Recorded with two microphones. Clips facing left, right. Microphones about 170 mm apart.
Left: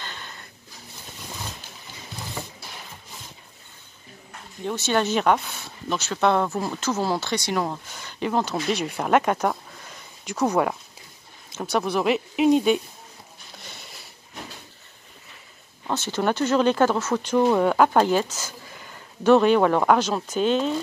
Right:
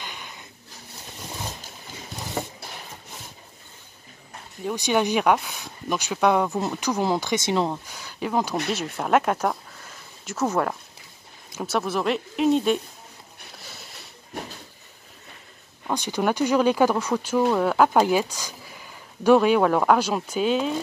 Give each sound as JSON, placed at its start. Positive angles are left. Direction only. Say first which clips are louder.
{"t": 0.0, "sound": "a sound", "louder": "even", "side_deg": -15}
{"t": 2.4, "sound": "a sound", "louder": "right 7 dB", "side_deg": -45}
{"t": 4.6, "sound": "speech", "louder": "right 1 dB", "side_deg": -15}
{"t": 7.9, "sound": "speech", "louder": "left 1 dB", "side_deg": -5}
{"t": 11.5, "sound": "speech", "louder": "left 1 dB", "side_deg": -5}
{"t": 13.6, "sound": "sniff", "louder": "left 1 dB", "side_deg": -5}
{"t": 15.9, "sound": "speech", "louder": "even", "side_deg": -15}